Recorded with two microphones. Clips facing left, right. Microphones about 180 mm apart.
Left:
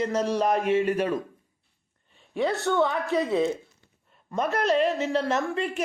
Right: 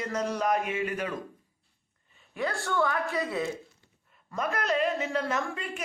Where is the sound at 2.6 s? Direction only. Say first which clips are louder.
Left 4 dB; 20° left (ahead or behind).